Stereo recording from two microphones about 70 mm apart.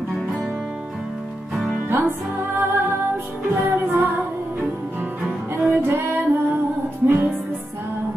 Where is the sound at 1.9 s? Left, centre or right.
Right.